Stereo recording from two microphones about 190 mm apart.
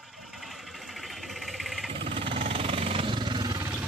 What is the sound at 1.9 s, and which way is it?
Jackhammer, 30° right (ahead or behind).